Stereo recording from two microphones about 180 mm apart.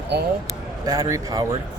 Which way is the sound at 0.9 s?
15° right (ahead or behind).